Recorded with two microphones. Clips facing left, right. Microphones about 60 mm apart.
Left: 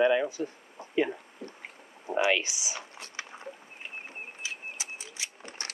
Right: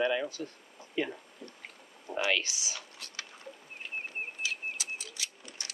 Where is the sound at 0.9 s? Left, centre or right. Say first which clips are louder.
Left 6 dB; centre.